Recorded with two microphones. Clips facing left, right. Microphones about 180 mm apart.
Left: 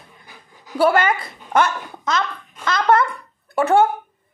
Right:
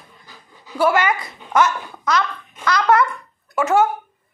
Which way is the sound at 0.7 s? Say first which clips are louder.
Left 1 dB; 30° left (ahead or behind).